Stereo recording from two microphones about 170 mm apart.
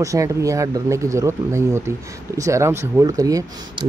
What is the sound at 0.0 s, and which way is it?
Speech, 20° right (ahead or behind).